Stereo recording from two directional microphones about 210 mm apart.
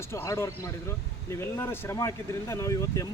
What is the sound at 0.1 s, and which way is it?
Speech, 15° left (ahead or behind).